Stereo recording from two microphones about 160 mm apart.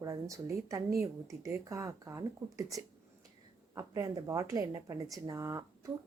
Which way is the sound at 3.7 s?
20° right (ahead or behind).